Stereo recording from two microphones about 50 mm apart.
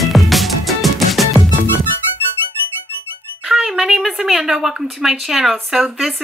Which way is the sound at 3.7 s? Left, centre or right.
Centre.